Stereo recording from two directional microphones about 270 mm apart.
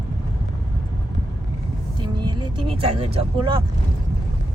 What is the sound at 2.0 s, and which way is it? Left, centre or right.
Vehicle, centre.